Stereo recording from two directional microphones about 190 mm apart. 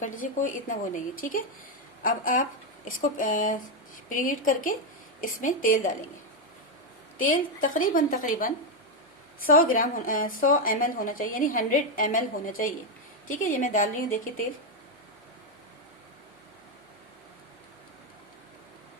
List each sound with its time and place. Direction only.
0.0 s a woman's voice: 45° left (ahead or behind)
7.3 s a woman's voice: 45° left (ahead or behind)
9.7 s a woman's voice: 45° left (ahead or behind)